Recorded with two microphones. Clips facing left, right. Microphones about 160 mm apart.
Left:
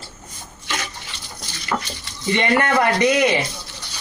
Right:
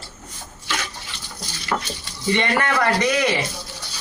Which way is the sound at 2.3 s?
20° left (ahead or behind).